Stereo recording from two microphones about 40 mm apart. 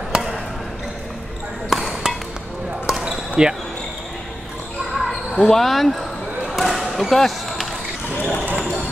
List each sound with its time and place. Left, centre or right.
1.7 s ping: centre
2.9 s basketball bounce: centre
4.9 s basketball bounce: centre
8.5 s speech: right